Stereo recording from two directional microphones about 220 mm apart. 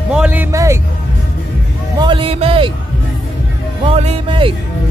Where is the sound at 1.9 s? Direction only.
20° right (ahead or behind).